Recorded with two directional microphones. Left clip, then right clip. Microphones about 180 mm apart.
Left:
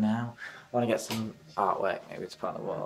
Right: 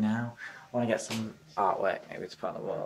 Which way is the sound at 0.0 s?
5° left (ahead or behind).